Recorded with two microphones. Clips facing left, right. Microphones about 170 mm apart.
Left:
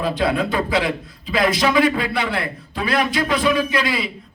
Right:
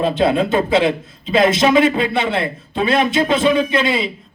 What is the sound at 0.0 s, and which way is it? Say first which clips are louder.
A man's voice: right 4 dB; 25° right (ahead or behind).